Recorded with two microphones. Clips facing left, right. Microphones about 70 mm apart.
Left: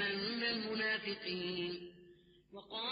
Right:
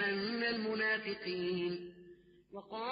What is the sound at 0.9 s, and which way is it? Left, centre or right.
Mantra, centre.